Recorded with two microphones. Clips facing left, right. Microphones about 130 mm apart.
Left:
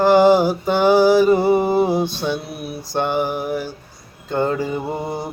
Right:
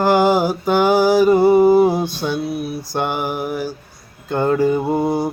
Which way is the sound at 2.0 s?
25° left (ahead or behind).